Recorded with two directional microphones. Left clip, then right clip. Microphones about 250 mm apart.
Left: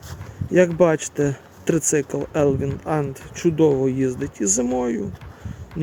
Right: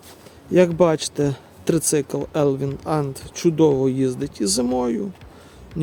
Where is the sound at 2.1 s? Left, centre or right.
Centre.